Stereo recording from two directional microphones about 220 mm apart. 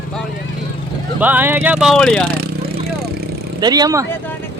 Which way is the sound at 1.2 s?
10° right (ahead or behind).